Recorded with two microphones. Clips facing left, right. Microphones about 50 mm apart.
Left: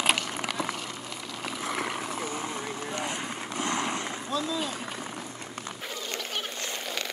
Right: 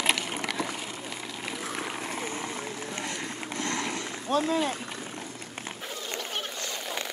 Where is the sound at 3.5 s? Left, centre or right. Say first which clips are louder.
Left 2 dB; left.